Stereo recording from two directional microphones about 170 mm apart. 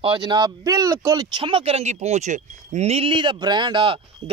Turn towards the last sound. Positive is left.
turn(degrees=-30)  # may be behind; listen again after turning